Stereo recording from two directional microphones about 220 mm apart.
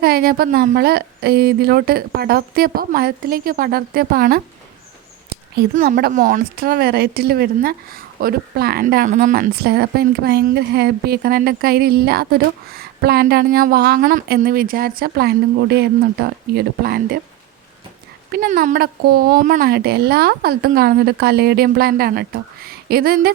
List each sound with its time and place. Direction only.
0.0 s speech: 45° right (ahead or behind)
5.7 s speech: 40° right (ahead or behind)
18.3 s speech: 40° right (ahead or behind)